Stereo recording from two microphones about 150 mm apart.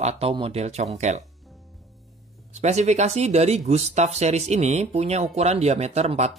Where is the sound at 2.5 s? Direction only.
50° right (ahead or behind).